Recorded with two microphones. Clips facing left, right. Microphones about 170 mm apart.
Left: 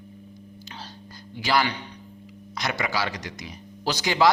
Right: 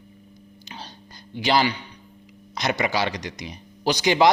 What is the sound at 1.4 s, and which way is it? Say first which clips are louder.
A man's voice: right 3 dB; 20° right (ahead or behind).